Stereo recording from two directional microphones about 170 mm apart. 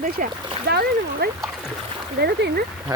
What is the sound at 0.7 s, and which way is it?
Speech, 65° right (ahead or behind).